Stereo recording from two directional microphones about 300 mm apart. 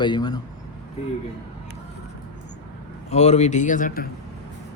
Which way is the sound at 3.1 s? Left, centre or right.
Left.